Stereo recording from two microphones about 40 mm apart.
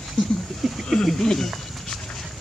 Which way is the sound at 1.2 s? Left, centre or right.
Centre.